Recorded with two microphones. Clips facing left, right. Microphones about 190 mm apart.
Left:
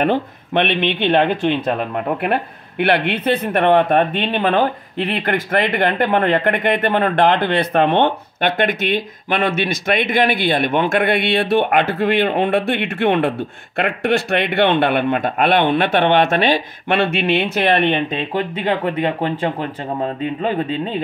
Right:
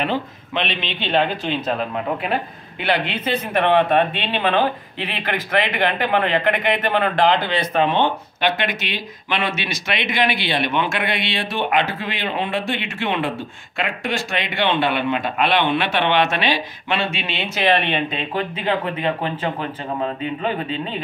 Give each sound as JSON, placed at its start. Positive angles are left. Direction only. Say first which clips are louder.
{"t": 0.0, "sound": "speech", "louder": "left 5 dB", "side_deg": 55}
{"t": 19.2, "sound": "speech", "louder": "left 4 dB", "side_deg": 35}